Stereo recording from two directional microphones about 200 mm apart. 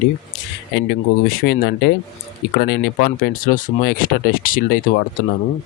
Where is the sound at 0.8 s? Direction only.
55° left (ahead or behind).